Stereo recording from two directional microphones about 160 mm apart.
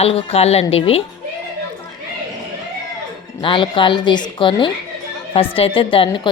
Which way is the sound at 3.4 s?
30° left (ahead or behind).